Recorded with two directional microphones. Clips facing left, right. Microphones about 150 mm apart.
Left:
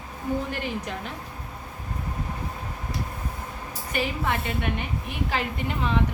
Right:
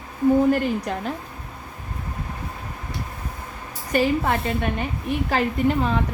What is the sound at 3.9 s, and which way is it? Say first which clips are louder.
A woman's voice: right 7 dB; 40° right (ahead or behind).